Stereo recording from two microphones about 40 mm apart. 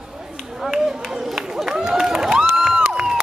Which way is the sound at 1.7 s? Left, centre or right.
Centre.